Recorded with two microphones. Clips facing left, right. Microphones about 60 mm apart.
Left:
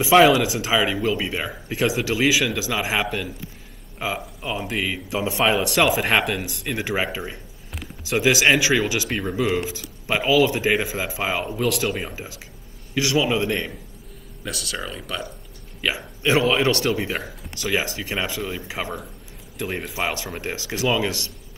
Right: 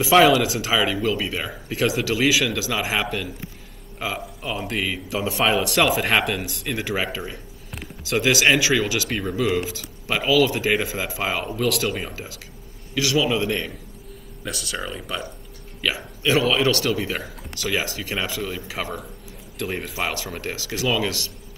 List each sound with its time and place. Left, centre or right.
0.2 s speech: centre
0.6 s speech: centre
2.3 s speech: centre
6.8 s a man's voice: left
7.7 s a sound: centre
8.3 s a man's voice: left
9.8 s a man's voice: left
10.6 s speech: centre
10.9 s speech: left; by 12.2 s centre
12.9 s a man's voice: left
14.4 s speech: centre
16.2 s a man's voice: left
19.6 s speech: centre
20.4 s a man's voice: left